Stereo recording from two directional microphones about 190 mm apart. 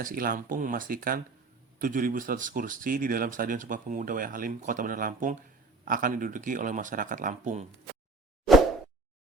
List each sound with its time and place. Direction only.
0.0 s speech: 50° right (ahead or behind)